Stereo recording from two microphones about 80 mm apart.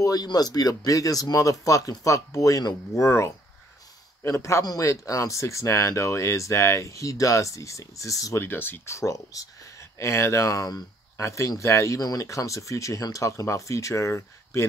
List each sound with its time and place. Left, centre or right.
0.0 s speech: left
8.5 s speech: left
8.9 s speech: left